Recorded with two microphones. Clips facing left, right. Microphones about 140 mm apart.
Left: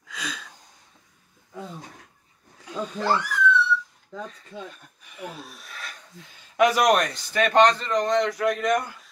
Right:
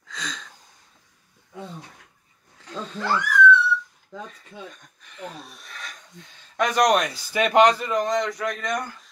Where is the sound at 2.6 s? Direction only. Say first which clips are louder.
Left 2 dB; 10° left (ahead or behind).